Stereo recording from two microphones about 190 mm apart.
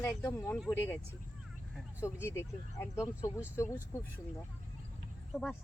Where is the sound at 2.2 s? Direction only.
15° left (ahead or behind).